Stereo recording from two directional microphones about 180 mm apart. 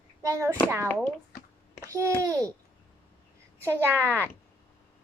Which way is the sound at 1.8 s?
15° right (ahead or behind).